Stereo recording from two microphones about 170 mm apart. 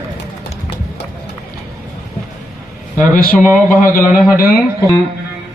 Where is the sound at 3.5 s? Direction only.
10° left (ahead or behind).